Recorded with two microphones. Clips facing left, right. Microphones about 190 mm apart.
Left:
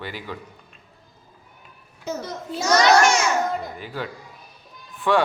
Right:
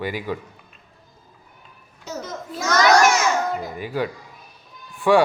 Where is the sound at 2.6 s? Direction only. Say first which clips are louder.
Left 1 dB; 20° left (ahead or behind).